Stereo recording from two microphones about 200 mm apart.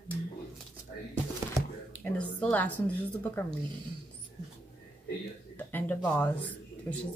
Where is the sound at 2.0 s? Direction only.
5° left (ahead or behind).